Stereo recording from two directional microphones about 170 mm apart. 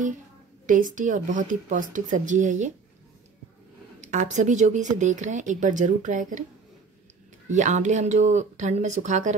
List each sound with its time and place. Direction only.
0.7 s a woman's voice: 50° right (ahead or behind)
4.0 s a woman's voice: 45° right (ahead or behind)
7.4 s a woman's voice: 45° right (ahead or behind)